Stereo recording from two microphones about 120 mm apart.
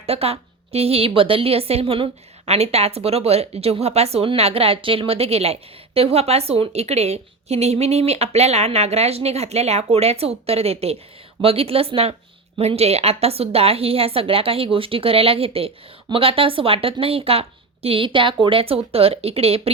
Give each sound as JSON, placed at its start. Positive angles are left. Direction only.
{"t": 0.0, "sound": "a woman's voice", "side_deg": -55}